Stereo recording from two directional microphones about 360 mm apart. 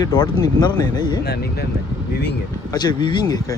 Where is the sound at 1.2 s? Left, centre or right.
Left.